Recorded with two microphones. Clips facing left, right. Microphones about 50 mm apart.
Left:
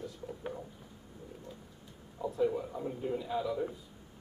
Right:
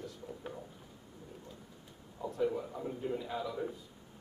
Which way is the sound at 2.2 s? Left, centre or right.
Centre.